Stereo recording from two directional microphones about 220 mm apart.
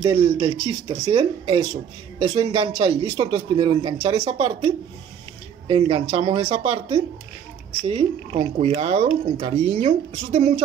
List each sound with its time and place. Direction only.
0.0 s speech: 25° right (ahead or behind)